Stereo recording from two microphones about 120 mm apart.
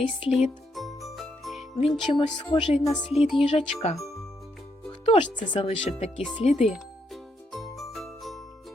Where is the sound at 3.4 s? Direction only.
60° left (ahead or behind).